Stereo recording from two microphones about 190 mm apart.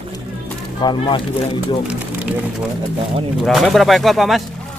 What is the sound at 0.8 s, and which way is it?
Speech, 25° left (ahead or behind).